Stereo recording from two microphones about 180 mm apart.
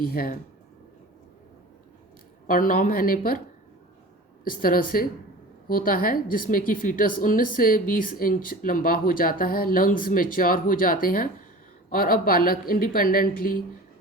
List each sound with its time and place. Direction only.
0.0 s speech: 55° left (ahead or behind)
2.5 s speech: 50° left (ahead or behind)
4.4 s speech: 55° left (ahead or behind)